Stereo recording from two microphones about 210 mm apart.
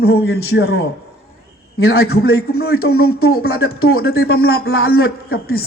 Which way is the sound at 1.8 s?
45° left (ahead or behind).